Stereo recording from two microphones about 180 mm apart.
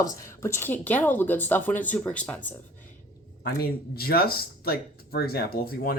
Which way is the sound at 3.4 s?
60° left (ahead or behind).